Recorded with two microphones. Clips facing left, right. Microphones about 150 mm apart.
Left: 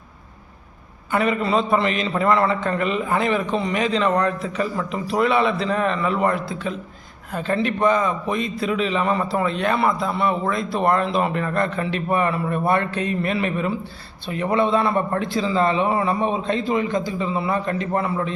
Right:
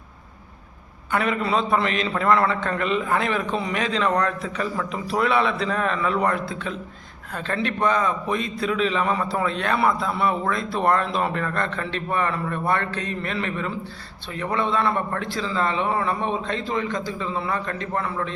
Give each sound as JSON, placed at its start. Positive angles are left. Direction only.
{"t": 1.1, "sound": "a man's voice", "side_deg": 0}